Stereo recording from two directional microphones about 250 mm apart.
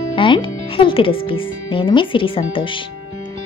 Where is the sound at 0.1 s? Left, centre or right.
Centre.